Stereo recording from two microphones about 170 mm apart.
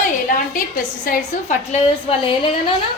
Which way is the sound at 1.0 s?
50° left (ahead or behind).